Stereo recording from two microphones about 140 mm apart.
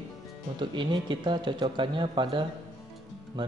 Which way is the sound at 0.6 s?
35° right (ahead or behind).